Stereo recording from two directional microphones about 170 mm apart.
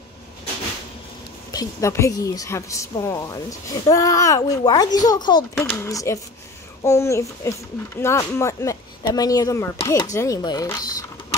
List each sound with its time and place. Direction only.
1.5 s a woman's voice: 20° left (ahead or behind)
5.5 s a child's voice: 15° left (ahead or behind)